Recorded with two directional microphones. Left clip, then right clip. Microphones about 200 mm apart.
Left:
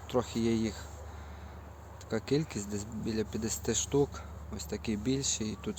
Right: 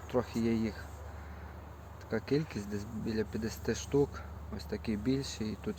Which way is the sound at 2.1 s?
15° left (ahead or behind).